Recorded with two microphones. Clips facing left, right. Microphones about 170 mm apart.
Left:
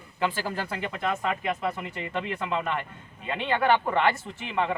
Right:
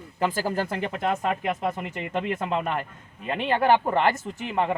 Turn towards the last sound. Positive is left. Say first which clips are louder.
# right 2 dB
turn(degrees=-40)  # may be behind; listen again after turning